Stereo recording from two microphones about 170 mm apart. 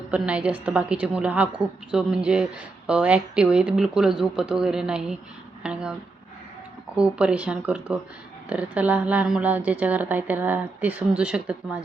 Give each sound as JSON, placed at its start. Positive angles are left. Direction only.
{"t": 0.1, "sound": "a woman's voice", "side_deg": -5}